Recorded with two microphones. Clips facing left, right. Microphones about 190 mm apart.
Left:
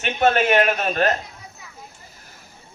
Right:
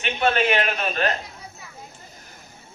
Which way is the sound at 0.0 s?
45° left (ahead or behind).